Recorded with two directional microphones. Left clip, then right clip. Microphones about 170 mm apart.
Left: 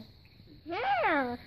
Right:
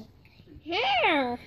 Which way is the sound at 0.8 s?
10° left (ahead or behind).